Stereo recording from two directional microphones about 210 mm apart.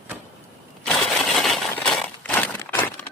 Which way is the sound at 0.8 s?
5° left (ahead or behind).